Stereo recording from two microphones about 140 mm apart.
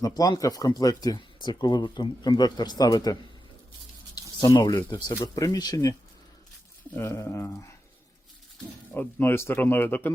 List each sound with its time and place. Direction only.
0.0 s speech: 25° left (ahead or behind)
4.1 s a sound: 30° left (ahead or behind)
4.9 s speech: 30° left (ahead or behind)
6.9 s speech: 20° left (ahead or behind)
8.9 s speech: 15° left (ahead or behind)